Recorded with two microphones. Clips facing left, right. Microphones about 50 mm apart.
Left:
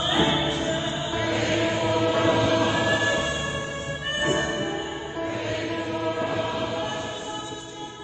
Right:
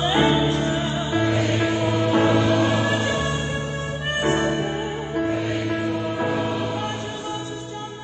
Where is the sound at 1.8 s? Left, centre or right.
Centre.